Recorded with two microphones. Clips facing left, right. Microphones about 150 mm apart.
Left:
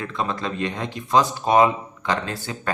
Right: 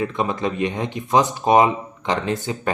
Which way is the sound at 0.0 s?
15° right (ahead or behind).